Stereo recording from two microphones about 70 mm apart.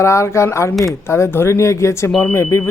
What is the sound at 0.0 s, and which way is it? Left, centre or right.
A man's voice, left.